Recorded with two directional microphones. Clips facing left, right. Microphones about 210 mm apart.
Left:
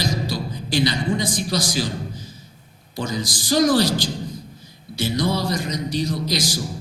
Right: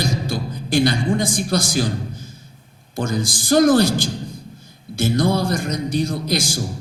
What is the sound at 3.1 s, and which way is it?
Speech, 50° right (ahead or behind).